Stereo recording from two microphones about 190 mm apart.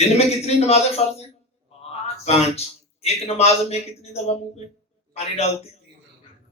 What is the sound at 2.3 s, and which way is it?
Speech, 35° left (ahead or behind).